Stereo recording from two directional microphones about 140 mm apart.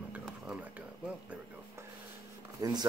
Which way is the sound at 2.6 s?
30° right (ahead or behind).